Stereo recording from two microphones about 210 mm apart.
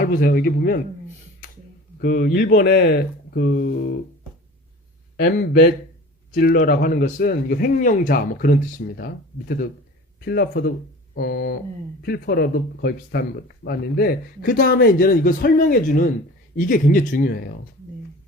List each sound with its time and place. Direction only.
0.0 s a man's voice: 45° left (ahead or behind)
2.0 s a man's voice: 50° left (ahead or behind)
5.1 s a man's voice: 50° left (ahead or behind)